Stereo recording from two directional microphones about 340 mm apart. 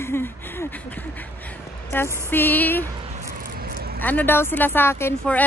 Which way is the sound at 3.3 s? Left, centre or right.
Right.